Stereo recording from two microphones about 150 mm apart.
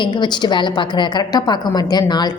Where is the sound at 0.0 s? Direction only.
30° left (ahead or behind).